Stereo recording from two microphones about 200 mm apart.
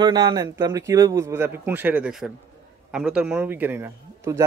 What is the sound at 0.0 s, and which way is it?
Speech, 20° right (ahead or behind).